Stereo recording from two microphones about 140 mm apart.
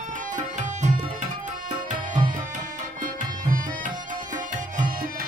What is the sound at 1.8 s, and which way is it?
Music, 70° right (ahead or behind).